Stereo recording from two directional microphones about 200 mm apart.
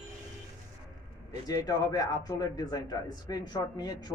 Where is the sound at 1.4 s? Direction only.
20° left (ahead or behind).